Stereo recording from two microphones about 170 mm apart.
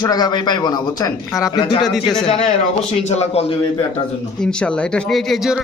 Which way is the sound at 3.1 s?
40° left (ahead or behind).